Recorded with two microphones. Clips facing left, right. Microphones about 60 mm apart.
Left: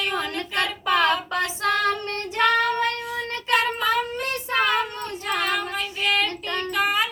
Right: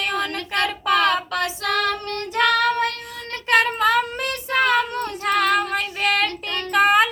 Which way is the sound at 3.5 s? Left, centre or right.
Right.